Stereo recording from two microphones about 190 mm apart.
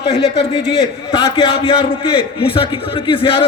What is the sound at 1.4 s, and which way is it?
A man's voice, 30° left (ahead or behind).